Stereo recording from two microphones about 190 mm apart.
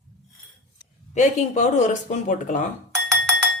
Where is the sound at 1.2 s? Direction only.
40° left (ahead or behind).